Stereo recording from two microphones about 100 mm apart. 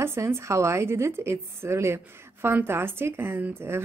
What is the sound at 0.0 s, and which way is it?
Speech, 25° right (ahead or behind).